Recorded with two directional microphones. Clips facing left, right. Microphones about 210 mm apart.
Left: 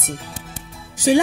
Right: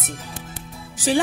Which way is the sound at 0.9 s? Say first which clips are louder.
Left 5 dB; 10° left (ahead or behind).